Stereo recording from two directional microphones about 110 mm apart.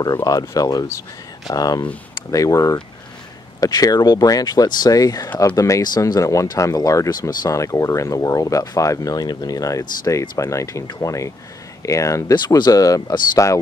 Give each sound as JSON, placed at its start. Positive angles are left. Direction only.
{"t": 0.0, "sound": "speech", "side_deg": 35}
{"t": 12.4, "sound": "speech", "side_deg": 40}